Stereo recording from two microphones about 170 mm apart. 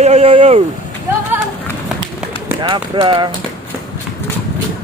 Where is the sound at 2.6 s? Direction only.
25° right (ahead or behind).